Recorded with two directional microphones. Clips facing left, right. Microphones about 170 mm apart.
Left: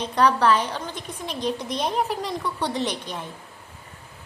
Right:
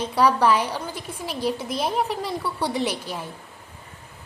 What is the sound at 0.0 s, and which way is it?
A woman's voice, 10° right (ahead or behind).